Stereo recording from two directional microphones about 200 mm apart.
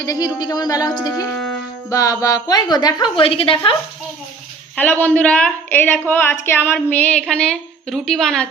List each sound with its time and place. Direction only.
0.0 s a woman's voice: 20° left (ahead or behind)
4.8 s a woman's voice: 10° left (ahead or behind)